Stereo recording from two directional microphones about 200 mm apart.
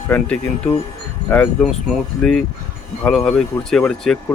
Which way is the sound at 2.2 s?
5° left (ahead or behind).